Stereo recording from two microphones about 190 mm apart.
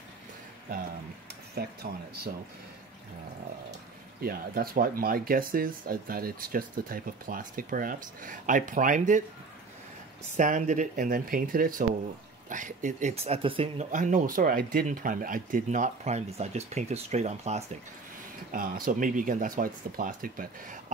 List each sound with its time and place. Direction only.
1.5 s speech: 55° right (ahead or behind)
4.2 s speech: 50° right (ahead or behind)
10.3 s speech: 40° right (ahead or behind)
13.9 s speech: 45° right (ahead or behind)
18.5 s speech: 45° right (ahead or behind)